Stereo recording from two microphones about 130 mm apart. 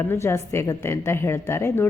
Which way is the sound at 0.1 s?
20° left (ahead or behind).